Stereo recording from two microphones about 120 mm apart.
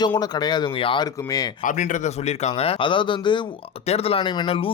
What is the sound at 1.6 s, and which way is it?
A man's voice, 90° left.